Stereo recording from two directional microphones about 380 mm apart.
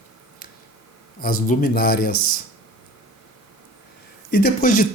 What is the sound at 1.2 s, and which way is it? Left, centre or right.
Speech, left.